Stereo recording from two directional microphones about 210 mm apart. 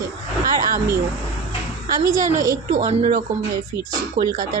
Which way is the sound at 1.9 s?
35° right (ahead or behind).